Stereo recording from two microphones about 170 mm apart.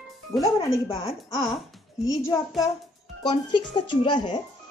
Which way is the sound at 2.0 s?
20° left (ahead or behind).